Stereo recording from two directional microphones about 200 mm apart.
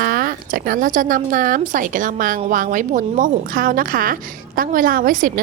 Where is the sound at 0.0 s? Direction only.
45° right (ahead or behind).